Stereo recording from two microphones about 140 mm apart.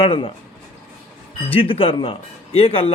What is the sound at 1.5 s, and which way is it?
A man's voice, 40° left (ahead or behind).